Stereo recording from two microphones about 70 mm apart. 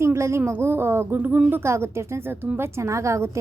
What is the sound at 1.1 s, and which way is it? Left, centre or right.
Speech, centre.